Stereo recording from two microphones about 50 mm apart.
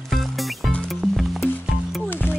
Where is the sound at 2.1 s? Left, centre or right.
Left.